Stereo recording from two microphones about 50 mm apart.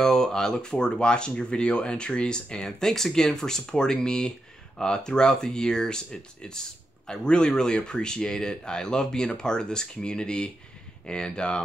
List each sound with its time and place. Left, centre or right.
0.0 s speech: centre